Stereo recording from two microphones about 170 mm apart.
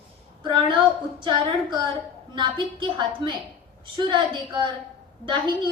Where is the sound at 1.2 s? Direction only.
25° right (ahead or behind).